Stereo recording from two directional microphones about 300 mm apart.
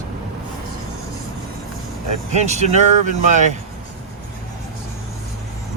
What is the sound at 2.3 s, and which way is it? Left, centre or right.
Speech, right.